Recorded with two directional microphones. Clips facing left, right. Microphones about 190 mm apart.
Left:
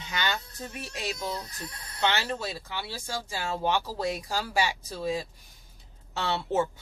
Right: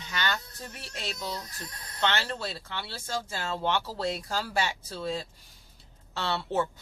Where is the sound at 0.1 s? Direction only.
15° left (ahead or behind).